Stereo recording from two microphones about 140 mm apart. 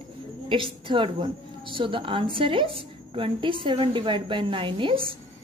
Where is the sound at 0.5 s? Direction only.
40° right (ahead or behind).